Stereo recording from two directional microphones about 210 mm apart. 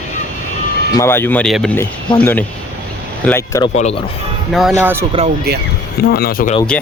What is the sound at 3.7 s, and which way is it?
Speech, 30° left (ahead or behind).